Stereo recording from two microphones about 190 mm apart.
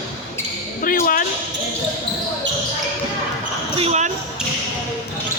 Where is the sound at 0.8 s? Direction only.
45° left (ahead or behind).